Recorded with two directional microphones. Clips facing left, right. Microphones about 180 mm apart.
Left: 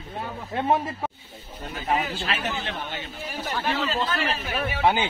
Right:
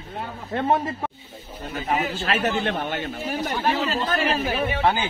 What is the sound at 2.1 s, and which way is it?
A man's voice, 50° right (ahead or behind).